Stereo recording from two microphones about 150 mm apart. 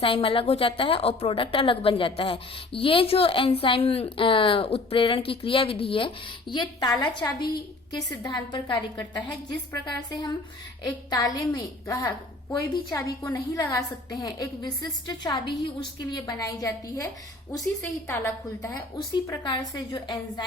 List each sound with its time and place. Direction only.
0.0 s a woman's voice: 35° left (ahead or behind); by 17.1 s 20° left (ahead or behind)
18.1 s a woman's voice: 15° left (ahead or behind)